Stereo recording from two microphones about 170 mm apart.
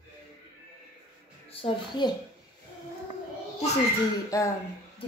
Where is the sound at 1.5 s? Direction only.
35° left (ahead or behind).